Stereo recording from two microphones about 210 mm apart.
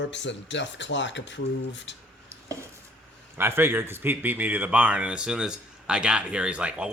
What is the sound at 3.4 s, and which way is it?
A man's voice, 10° right (ahead or behind).